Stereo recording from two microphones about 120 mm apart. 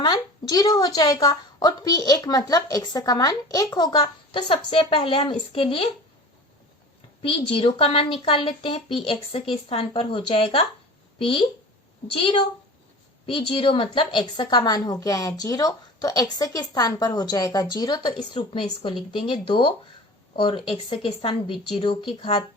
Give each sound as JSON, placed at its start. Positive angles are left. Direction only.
{"t": 0.0, "sound": "a woman's voice", "side_deg": 35}
{"t": 4.3, "sound": "speech", "side_deg": 45}
{"t": 7.2, "sound": "a woman's voice", "side_deg": 50}